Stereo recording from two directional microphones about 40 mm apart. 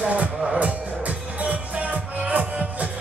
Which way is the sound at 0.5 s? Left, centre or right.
Right.